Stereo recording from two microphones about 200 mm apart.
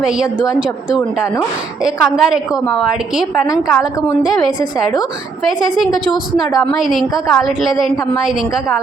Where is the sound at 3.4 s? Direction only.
15° left (ahead or behind).